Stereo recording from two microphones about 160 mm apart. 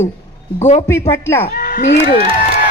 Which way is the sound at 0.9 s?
15° left (ahead or behind).